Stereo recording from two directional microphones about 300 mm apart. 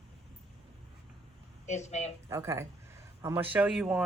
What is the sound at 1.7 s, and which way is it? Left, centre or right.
Speech, left.